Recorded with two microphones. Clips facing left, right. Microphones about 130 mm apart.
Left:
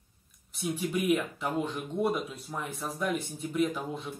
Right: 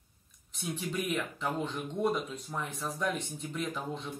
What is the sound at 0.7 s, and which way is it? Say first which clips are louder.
Speech: left 6 dB; 10° left (ahead or behind).